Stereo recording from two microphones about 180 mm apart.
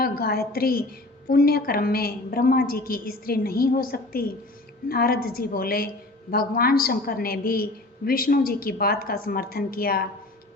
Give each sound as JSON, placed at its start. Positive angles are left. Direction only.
{"t": 0.0, "sound": "a woman's voice", "side_deg": 60}